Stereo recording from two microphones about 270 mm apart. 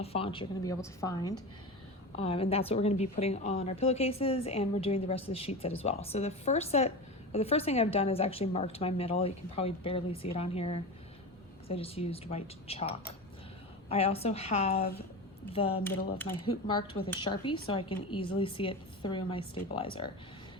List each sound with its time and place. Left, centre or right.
0.0 s a woman's voice: left
13.9 s a woman's voice: left